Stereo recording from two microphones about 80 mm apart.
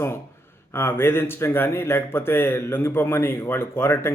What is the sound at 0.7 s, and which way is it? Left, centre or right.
A man's voice, left.